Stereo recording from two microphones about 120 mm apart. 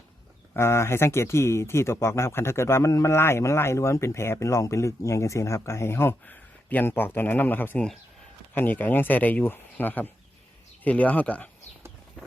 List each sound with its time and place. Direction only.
0.5 s speech: 20° left (ahead or behind)